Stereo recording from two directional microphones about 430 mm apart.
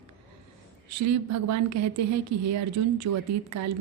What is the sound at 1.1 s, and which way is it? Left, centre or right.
A woman's voice, right.